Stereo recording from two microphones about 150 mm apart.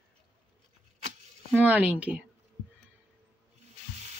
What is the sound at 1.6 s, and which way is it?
Speech, 10° right (ahead or behind).